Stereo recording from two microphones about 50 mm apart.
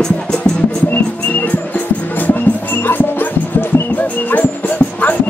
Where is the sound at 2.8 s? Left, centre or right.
Left.